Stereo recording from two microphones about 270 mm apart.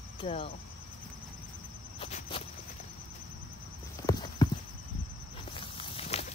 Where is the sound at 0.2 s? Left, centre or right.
Left.